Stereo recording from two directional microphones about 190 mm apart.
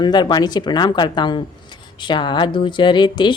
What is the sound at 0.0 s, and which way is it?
A woman's voice, 20° left (ahead or behind).